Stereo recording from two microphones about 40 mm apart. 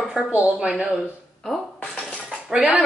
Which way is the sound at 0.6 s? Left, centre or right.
Right.